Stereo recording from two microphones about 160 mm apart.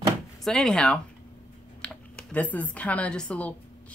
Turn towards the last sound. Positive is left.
turn(degrees=10)  # may be behind; listen again after turning